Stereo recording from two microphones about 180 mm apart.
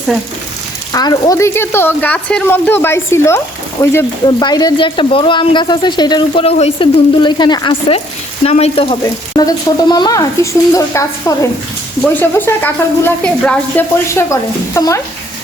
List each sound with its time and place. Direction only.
0.9 s speech: 20° left (ahead or behind)